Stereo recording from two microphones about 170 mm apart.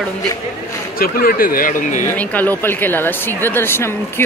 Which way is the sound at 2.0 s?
10° left (ahead or behind).